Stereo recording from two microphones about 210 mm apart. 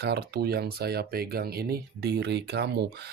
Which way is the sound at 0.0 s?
50° right (ahead or behind).